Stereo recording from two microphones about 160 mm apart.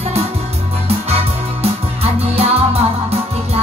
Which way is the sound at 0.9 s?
40° right (ahead or behind).